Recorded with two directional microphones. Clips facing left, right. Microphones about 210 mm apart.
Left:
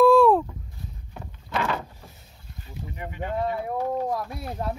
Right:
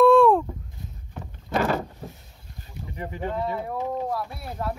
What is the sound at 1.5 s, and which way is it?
Boat, 40° right (ahead or behind).